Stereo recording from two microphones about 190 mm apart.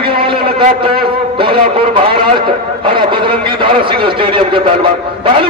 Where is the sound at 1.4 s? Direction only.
25° right (ahead or behind).